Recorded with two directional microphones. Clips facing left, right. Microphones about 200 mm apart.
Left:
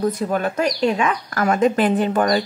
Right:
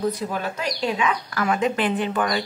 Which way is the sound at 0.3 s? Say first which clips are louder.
Left 7 dB; 50° left (ahead or behind).